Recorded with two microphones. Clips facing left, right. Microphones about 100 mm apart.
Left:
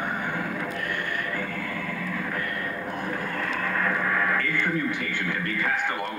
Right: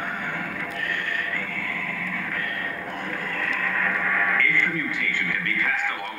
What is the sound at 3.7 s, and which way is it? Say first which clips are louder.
Radio: left 1 dB; 25° left (ahead or behind).